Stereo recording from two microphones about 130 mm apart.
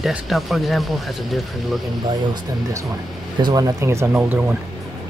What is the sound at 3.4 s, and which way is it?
Speech, 30° right (ahead or behind).